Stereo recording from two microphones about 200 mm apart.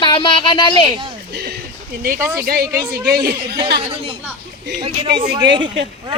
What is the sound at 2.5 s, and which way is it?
Speech, 50° right (ahead or behind).